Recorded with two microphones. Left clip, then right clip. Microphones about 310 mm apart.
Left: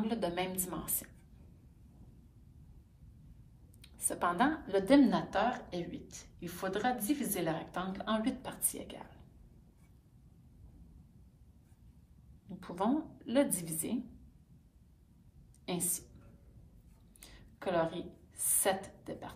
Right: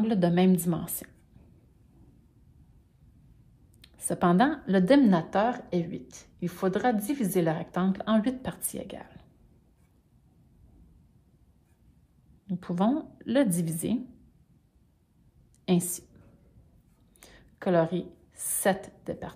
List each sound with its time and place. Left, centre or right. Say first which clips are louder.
0.0 s a woman's voice: right 9 dB; right
3.8 s a woman's voice: right 7 dB; right
12.4 s a woman's voice: right 6 dB; right
17.2 s a sound: right 7 dB; right